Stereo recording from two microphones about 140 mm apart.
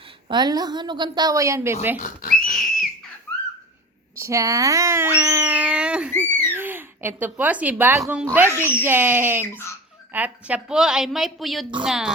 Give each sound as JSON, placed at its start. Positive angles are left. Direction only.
{"t": 0.3, "sound": "a woman's voice", "side_deg": -30}
{"t": 2.0, "sound": "whistling", "side_deg": 80}
{"t": 4.2, "sound": "speech", "side_deg": -20}
{"t": 6.1, "sound": "owl", "side_deg": 15}
{"t": 6.5, "sound": "a woman's voice", "side_deg": -15}